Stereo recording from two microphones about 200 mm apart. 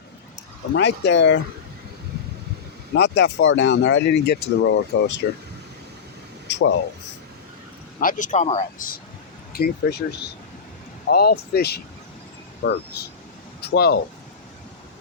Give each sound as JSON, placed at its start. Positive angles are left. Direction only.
{"t": 0.7, "sound": "speech", "side_deg": 60}
{"t": 2.9, "sound": "speech", "side_deg": 60}
{"t": 6.5, "sound": "speech", "side_deg": 60}
{"t": 7.9, "sound": "speech", "side_deg": 40}
{"t": 9.5, "sound": "speech", "side_deg": 50}
{"t": 11.1, "sound": "speech", "side_deg": 50}